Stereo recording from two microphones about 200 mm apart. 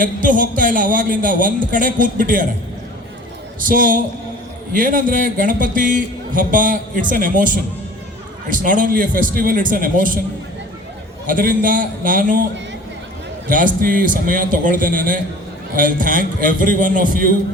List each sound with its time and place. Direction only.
0.0 s a man's voice: 40° right (ahead or behind)
3.7 s a man's voice: 45° right (ahead or behind)
11.3 s a man's voice: 45° right (ahead or behind)
13.5 s a man's voice: 40° right (ahead or behind)